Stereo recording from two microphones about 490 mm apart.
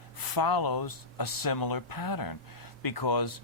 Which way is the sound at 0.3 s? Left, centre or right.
Left.